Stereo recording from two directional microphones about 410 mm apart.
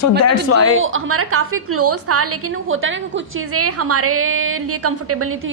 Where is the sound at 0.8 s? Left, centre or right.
Right.